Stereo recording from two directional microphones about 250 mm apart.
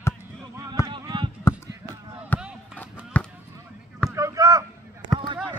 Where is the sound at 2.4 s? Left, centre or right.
Centre.